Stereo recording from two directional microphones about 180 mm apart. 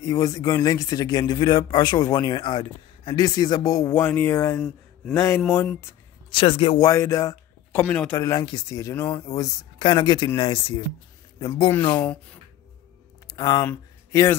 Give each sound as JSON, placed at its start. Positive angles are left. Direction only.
{"t": 0.0, "sound": "a man's voice", "side_deg": 20}
{"t": 4.6, "sound": "speech", "side_deg": 5}
{"t": 5.1, "sound": "speech", "side_deg": 15}
{"t": 6.3, "sound": "speech", "side_deg": 30}
{"t": 6.8, "sound": "a man's voice", "side_deg": 15}
{"t": 12.0, "sound": "speech", "side_deg": 5}
{"t": 13.4, "sound": "a man's voice", "side_deg": 20}